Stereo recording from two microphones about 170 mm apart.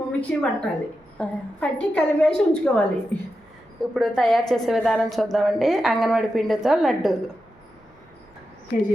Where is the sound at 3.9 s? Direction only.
5° left (ahead or behind).